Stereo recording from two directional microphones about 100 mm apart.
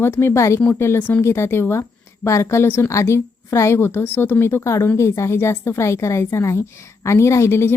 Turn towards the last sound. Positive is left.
turn(degrees=25)  # may be behind; listen again after turning